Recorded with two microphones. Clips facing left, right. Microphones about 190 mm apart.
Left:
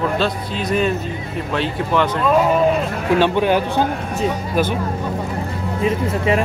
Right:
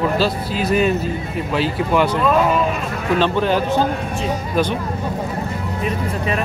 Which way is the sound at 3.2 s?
10° left (ahead or behind).